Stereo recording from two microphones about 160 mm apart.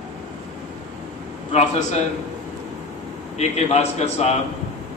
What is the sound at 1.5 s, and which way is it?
Speech, 45° left (ahead or behind).